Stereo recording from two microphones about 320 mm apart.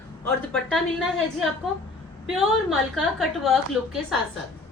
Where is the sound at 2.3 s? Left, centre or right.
Centre.